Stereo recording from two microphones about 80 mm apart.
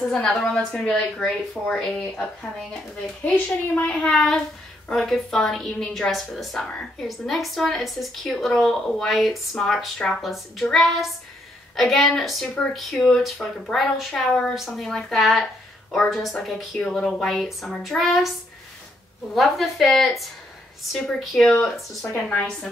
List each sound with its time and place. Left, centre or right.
0.1 s a woman's voice: centre
3.7 s a child's voice: centre
4.0 s a woman's voice: centre
19.3 s a woman's voice: centre